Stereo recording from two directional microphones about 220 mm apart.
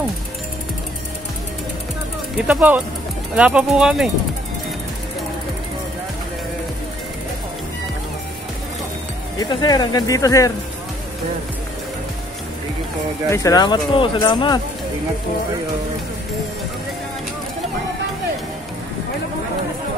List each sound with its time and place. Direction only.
2.3 s speech: 5° right (ahead or behind)
9.4 s speech: 15° left (ahead or behind)
13.3 s speech: 15° left (ahead or behind)